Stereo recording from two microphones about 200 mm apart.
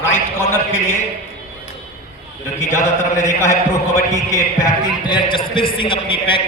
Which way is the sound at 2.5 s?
15° left (ahead or behind).